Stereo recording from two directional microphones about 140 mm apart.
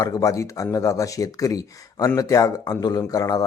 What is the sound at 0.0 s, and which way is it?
Speech, 25° left (ahead or behind).